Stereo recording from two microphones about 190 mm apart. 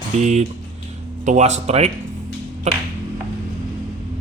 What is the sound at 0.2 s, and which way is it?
A man's voice, 35° right (ahead or behind).